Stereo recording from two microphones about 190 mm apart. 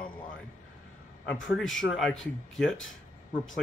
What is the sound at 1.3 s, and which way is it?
Speech, 85° left.